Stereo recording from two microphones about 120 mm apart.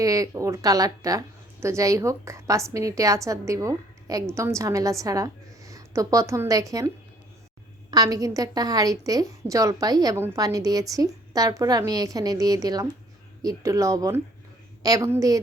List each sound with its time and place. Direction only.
0.0 s a woman's voice: 30° right (ahead or behind)